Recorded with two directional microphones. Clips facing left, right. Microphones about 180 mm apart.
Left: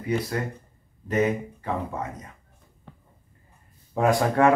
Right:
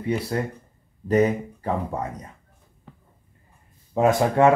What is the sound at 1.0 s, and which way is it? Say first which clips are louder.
Speech: right 4 dB; 35° right (ahead or behind).